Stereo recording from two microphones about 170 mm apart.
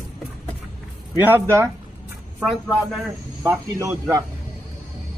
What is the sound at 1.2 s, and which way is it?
Speech, 15° right (ahead or behind).